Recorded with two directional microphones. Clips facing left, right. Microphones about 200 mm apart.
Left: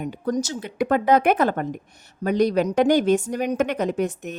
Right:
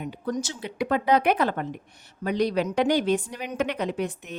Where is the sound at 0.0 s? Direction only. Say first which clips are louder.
Left 5 dB; 45° left (ahead or behind).